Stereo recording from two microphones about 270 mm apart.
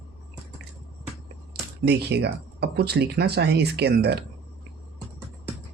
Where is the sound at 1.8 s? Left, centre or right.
Right.